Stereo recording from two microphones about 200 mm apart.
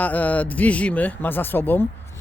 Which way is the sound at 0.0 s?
10° left (ahead or behind).